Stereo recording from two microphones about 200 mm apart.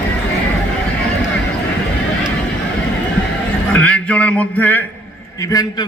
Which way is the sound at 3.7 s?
5° left (ahead or behind).